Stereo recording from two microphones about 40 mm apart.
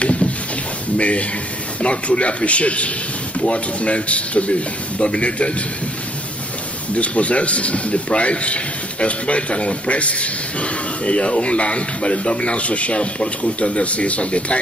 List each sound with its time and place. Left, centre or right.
0.9 s speech: left
7.0 s speech: left